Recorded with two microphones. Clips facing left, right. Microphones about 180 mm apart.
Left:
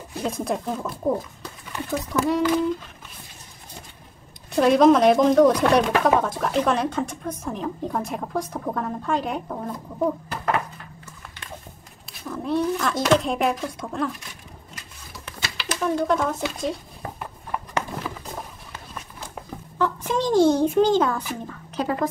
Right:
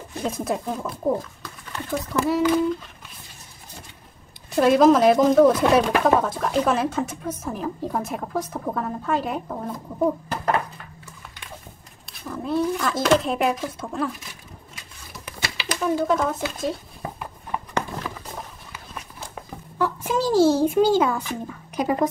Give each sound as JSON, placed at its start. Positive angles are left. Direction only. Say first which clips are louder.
{"t": 0.1, "sound": "speech", "louder": "even", "side_deg": 0}
{"t": 4.6, "sound": "speech", "louder": "even", "side_deg": 0}
{"t": 12.1, "sound": "speech", "louder": "left 1 dB", "side_deg": 0}
{"t": 15.1, "sound": "bird", "louder": "right 2 dB", "side_deg": 0}
{"t": 15.8, "sound": "speech", "louder": "right 1 dB", "side_deg": -5}
{"t": 18.7, "sound": "run", "louder": "even", "side_deg": -10}
{"t": 19.8, "sound": "a child's voice", "louder": "even", "side_deg": -10}